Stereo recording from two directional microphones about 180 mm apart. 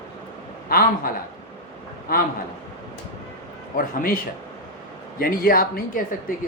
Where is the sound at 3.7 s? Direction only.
50° left (ahead or behind).